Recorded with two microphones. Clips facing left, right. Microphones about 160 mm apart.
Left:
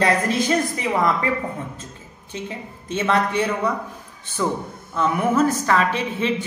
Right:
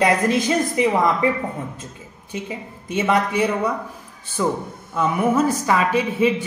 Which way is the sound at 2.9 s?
15° right (ahead or behind).